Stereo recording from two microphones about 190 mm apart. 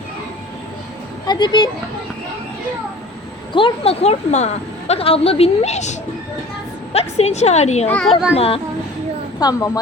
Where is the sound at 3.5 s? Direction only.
30° left (ahead or behind).